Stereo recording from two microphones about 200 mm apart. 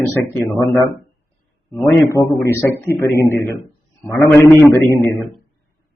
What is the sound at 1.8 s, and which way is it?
A man's voice, 5° left (ahead or behind).